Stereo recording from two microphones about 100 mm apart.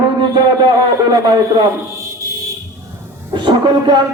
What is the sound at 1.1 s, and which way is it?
Speech, 40° right (ahead or behind).